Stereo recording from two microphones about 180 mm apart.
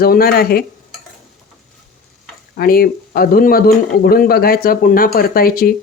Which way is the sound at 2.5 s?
55° left (ahead or behind).